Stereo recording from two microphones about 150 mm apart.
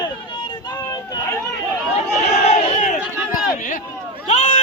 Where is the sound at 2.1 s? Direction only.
50° left (ahead or behind).